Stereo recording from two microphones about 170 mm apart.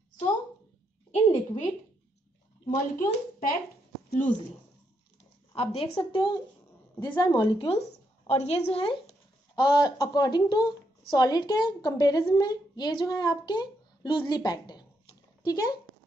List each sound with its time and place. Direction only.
1.1 s a woman's voice: 40° left (ahead or behind)
2.7 s a child's voice: 50° left (ahead or behind)
5.5 s a woman's voice: 35° left (ahead or behind)